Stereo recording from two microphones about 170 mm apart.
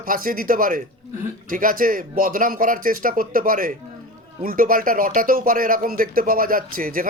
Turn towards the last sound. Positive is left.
turn(degrees=-55)  # may be behind; listen again after turning